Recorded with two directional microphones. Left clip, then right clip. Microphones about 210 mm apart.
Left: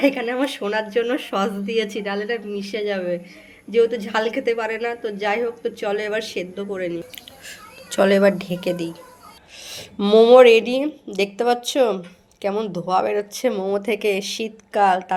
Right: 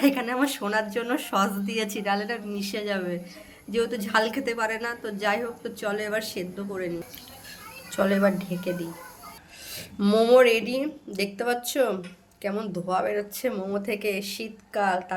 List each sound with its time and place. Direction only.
0.0 s speech: 15° left (ahead or behind)
7.9 s speech: 35° left (ahead or behind)
9.6 s speech: 20° left (ahead or behind)